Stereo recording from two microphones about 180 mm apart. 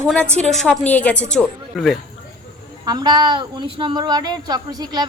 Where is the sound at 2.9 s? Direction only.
25° right (ahead or behind).